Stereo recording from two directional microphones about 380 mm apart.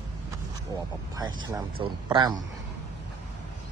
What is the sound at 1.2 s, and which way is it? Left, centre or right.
Speech, centre.